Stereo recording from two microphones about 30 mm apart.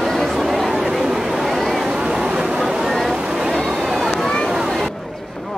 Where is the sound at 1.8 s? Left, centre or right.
Right.